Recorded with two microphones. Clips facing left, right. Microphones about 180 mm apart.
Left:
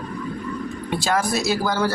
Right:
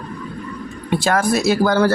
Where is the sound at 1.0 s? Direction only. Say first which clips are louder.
Right 5 dB; 55° right (ahead or behind).